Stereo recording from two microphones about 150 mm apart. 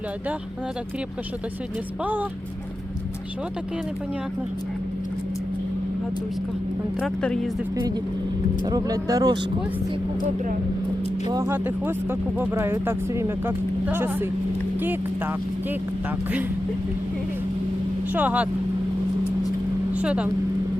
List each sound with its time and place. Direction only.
7.0 s speech: 5° left (ahead or behind)
8.6 s speech: 25° right (ahead or behind)
11.3 s speech: 20° right (ahead or behind)
18.1 s speech: 10° right (ahead or behind)
19.9 s speech: 10° right (ahead or behind)